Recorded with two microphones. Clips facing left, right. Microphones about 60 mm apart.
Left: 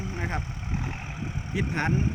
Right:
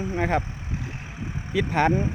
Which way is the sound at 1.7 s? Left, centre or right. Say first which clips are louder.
Right 7 dB; right.